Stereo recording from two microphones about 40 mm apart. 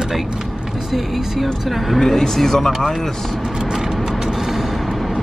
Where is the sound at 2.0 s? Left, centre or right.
Centre.